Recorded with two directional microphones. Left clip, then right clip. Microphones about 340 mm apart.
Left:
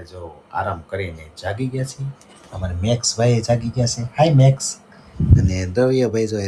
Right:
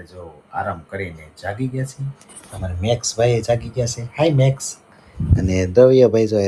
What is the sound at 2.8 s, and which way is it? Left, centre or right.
Speech, centre.